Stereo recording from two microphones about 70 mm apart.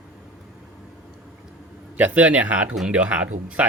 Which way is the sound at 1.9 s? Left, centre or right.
Right.